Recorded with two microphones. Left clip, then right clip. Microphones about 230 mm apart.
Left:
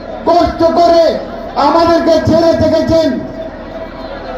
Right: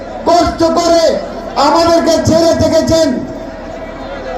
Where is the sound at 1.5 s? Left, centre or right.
Right.